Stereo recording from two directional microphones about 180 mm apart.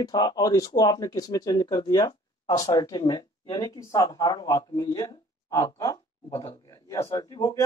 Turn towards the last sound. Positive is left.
turn(degrees=15)  # may be behind; listen again after turning